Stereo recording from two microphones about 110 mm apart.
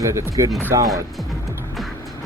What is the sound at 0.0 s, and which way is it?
Speech, 30° right (ahead or behind).